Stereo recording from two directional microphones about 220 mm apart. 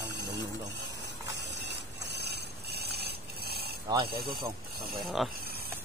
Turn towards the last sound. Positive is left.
turn(degrees=0)  # may be behind; listen again after turning